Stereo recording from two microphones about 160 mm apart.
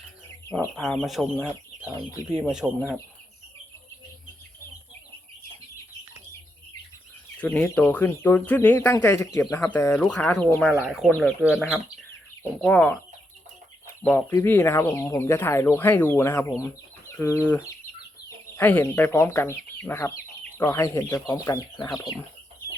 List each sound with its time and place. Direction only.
0.8 s speech: centre (ahead or behind)
2.4 s speech: 5° right (ahead or behind)
7.3 s speech: 10° left (ahead or behind)
12.4 s speech: 5° left (ahead or behind)
14.0 s speech: 10° left (ahead or behind)
18.5 s speech: 10° left (ahead or behind)